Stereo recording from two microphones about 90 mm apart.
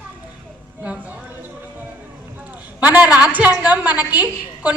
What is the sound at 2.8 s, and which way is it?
A woman's voice, 20° right (ahead or behind).